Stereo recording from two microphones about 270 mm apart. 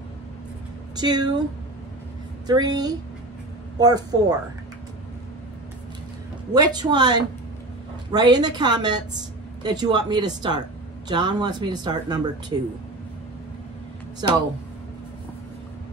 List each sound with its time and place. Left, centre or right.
0.9 s speech: centre
2.4 s speech: centre
6.5 s speech: centre
14.2 s speech: centre